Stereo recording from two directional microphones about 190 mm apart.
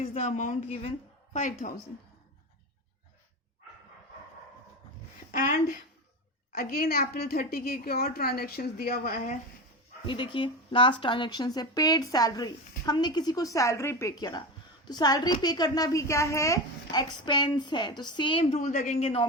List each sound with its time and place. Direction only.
0.0 s a woman's voice: 35° left (ahead or behind)
5.3 s a woman's voice: 45° left (ahead or behind)
10.1 s a woman's voice: 25° left (ahead or behind)
18.6 s a woman's voice: 40° left (ahead or behind)